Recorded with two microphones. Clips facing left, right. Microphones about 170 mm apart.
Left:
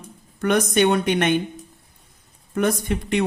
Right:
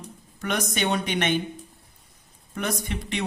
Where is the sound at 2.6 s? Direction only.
50° left (ahead or behind).